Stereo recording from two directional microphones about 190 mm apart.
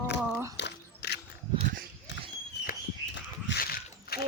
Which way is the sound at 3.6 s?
55° left (ahead or behind).